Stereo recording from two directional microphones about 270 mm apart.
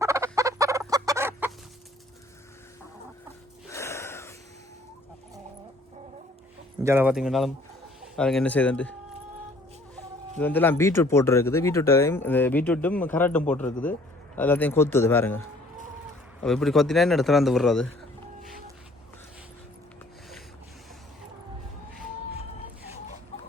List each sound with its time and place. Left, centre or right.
0.0 s fowl: centre
3.7 s gasp: centre
6.8 s speech: centre
10.3 s speech: centre
16.4 s speech: centre